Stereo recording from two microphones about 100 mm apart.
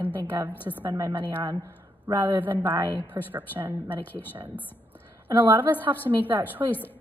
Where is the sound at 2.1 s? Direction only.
35° right (ahead or behind).